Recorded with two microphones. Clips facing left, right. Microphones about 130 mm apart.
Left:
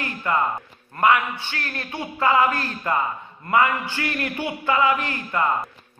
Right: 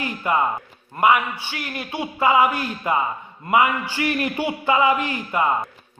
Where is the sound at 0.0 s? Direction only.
20° right (ahead or behind).